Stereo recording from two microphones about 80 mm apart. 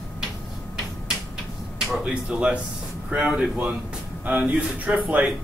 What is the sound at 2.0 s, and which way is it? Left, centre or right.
A man's voice, centre.